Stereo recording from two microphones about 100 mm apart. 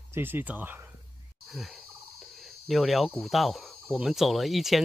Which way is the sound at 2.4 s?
Centre (ahead or behind).